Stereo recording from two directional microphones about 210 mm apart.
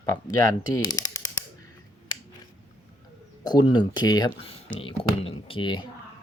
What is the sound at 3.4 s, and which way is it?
Speech, 20° left (ahead or behind).